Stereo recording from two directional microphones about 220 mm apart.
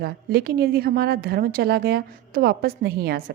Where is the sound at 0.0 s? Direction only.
45° right (ahead or behind).